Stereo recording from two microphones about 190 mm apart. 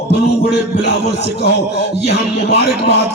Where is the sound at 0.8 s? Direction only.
60° left (ahead or behind).